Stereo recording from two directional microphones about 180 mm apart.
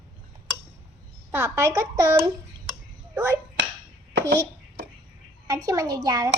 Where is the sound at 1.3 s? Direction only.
15° right (ahead or behind).